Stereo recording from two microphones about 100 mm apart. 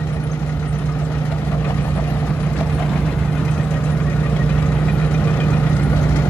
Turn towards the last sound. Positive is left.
turn(degrees=20)  # may be behind; listen again after turning